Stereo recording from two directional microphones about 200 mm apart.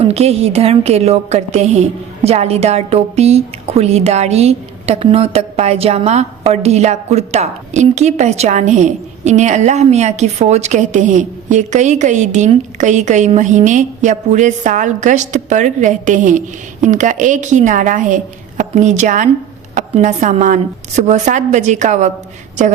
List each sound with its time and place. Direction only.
0.0 s a woman's voice: 30° right (ahead or behind)